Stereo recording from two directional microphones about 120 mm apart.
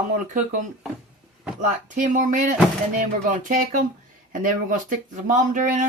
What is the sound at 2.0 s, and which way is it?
Speech, 90° right.